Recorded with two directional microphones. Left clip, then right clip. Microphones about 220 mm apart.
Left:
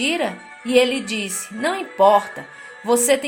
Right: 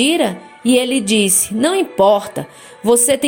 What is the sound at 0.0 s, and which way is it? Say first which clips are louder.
A woman's voice: right 6 dB; 40° right (ahead or behind).